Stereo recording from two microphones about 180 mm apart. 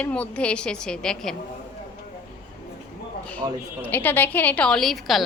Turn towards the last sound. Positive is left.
turn(degrees=0)  # may be behind; listen again after turning